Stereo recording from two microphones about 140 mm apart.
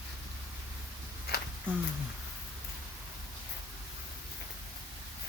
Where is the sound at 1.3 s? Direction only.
90° left.